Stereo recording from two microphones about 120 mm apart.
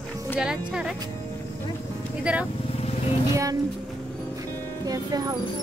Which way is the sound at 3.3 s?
25° right (ahead or behind).